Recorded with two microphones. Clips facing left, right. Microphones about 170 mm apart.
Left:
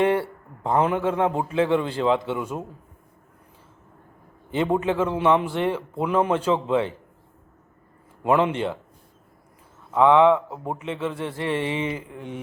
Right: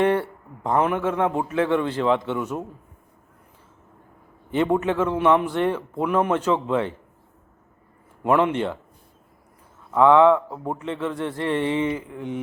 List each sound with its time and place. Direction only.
0.2 s a man's voice: 25° left (ahead or behind)
2.1 s a man's voice: 10° left (ahead or behind)
4.5 s a man's voice: 20° left (ahead or behind)
8.2 s a man's voice: 25° left (ahead or behind)
9.9 s a man's voice: 20° left (ahead or behind)
11.9 s mantra: 25° right (ahead or behind)